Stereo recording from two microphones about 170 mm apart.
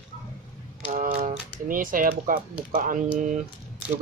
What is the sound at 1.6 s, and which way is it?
Speech, 55° right (ahead or behind).